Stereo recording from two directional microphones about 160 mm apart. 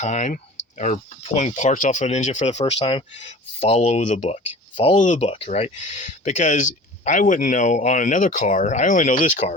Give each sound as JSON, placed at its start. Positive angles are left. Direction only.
{"t": 0.0, "sound": "speech", "side_deg": 45}